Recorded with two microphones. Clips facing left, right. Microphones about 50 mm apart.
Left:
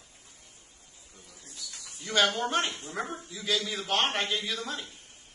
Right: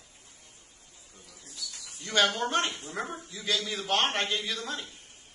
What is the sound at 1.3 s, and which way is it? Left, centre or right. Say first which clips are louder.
Bird: right 2 dB; centre.